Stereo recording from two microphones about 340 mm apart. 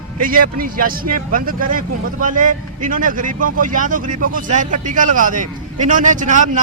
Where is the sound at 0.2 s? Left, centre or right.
Right.